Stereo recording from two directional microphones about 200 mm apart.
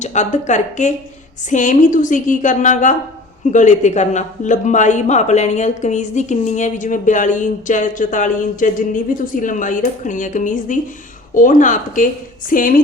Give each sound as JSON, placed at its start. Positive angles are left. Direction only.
{"t": 0.0, "sound": "a man's voice", "side_deg": 35}